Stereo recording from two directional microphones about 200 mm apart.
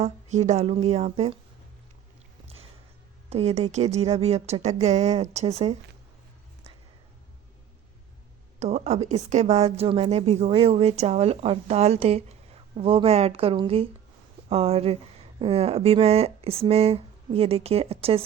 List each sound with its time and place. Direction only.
0.0 s a woman's voice: 35° right (ahead or behind)
3.2 s a woman's voice: 30° right (ahead or behind)
8.5 s a woman's voice: 35° right (ahead or behind)